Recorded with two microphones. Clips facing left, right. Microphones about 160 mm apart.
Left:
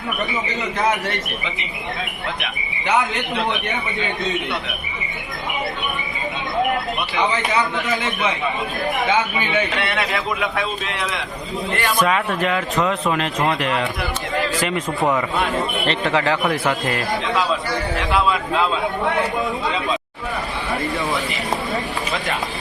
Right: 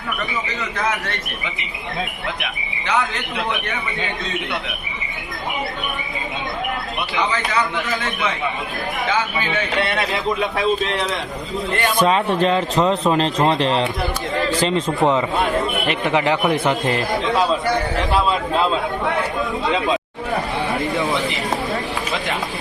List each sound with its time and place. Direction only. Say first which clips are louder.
0.8 s a man's voice: left 3 dB; 25° left (ahead or behind)
2.8 s a man's voice: left 2 dB; 20° left (ahead or behind)
11.8 s speech: right 2 dB; 30° right (ahead or behind)